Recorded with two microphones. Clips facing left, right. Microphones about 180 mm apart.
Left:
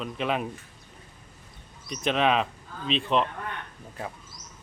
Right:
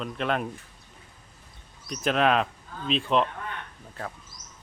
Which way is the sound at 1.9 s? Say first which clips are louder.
Right 1 dB; centre (ahead or behind).